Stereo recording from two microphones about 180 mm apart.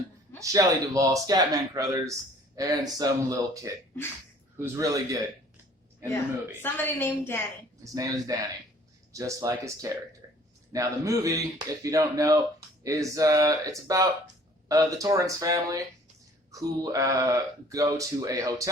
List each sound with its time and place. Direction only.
0.3 s speech: 20° right (ahead or behind)
6.6 s a woman's voice: 10° left (ahead or behind)
7.9 s speech: 20° right (ahead or behind)